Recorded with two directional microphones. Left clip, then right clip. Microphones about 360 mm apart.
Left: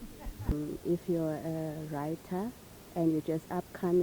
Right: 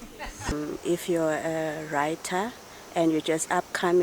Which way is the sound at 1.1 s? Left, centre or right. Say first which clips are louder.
Right 8 dB; centre.